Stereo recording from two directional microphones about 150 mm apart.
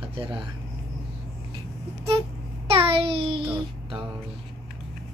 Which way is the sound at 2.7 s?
40° right (ahead or behind).